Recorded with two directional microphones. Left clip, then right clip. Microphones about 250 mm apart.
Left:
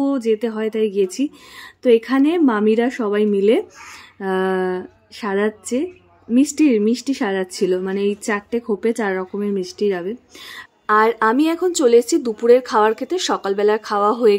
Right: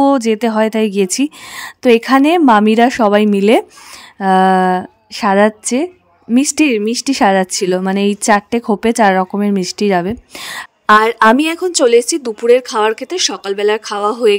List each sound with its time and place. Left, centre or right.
0.0 s a woman's voice: right